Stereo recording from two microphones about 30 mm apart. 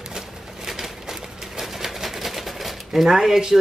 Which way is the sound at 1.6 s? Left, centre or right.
Centre.